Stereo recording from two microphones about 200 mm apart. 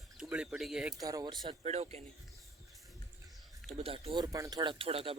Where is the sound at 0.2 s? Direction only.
5° right (ahead or behind).